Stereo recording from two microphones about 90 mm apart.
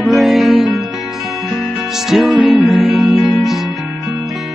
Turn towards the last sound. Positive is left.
turn(degrees=-5)  # may be behind; listen again after turning